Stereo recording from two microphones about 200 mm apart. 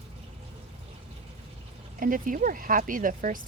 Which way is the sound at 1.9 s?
45° right (ahead or behind).